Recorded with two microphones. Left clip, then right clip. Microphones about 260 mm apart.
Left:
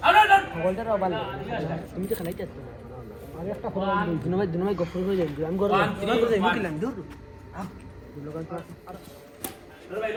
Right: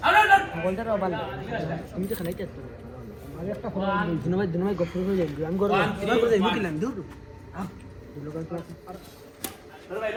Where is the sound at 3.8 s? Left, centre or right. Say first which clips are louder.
Left 1 dB; centre.